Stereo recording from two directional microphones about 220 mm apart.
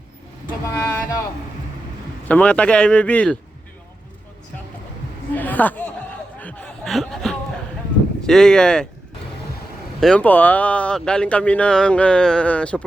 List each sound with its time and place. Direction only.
0.7 s speech: 15° left (ahead or behind)
2.2 s a man's voice: 5° left (ahead or behind)
5.3 s a sound: 5° left (ahead or behind)
6.4 s chuckle: 5° left (ahead or behind)
8.2 s a man's voice: 5° left (ahead or behind)
10.0 s a man's voice: 5° left (ahead or behind)